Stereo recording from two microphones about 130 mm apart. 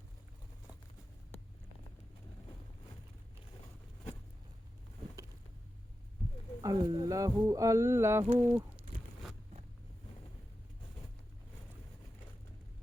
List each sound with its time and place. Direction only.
6.6 s speech: 25° right (ahead or behind)